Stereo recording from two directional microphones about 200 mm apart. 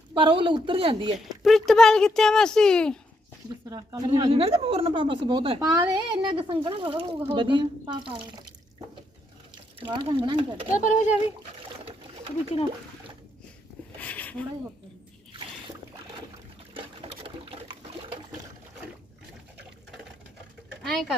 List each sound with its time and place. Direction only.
0.1 s a woman's voice: 25° right (ahead or behind)
1.4 s speech: centre (ahead or behind)
3.7 s a woman's voice: 20° right (ahead or behind)
9.8 s a woman's voice: 25° right (ahead or behind)
10.8 s speech: 35° left (ahead or behind)
14.0 s a sound: 5° left (ahead or behind)
16.7 s water: 25° right (ahead or behind)
20.8 s speech: centre (ahead or behind)